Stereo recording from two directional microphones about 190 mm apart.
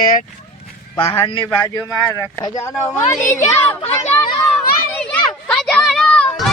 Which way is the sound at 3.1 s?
15° left (ahead or behind).